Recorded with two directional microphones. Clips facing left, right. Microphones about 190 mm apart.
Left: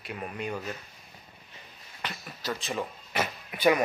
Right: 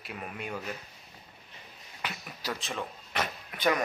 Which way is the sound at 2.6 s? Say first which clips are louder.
Left 4 dB; 5° left (ahead or behind).